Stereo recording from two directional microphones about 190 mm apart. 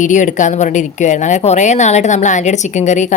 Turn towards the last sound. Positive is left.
turn(degrees=40)  # may be behind; listen again after turning